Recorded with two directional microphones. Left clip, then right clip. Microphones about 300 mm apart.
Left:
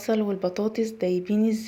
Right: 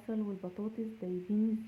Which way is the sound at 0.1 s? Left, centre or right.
Centre.